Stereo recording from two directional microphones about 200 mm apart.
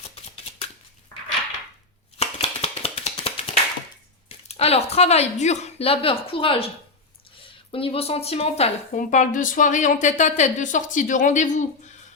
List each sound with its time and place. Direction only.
2.1 s a sound: 30° left (ahead or behind)
4.4 s speech: 30° left (ahead or behind)
7.7 s speech: 25° left (ahead or behind)